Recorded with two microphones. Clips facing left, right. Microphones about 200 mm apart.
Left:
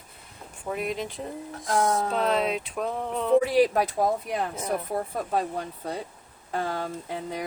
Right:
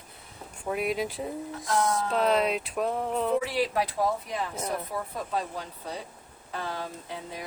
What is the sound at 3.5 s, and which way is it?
Speech, 45° left (ahead or behind).